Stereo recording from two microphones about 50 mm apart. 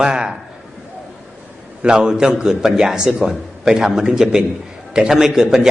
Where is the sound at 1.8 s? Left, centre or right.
Centre.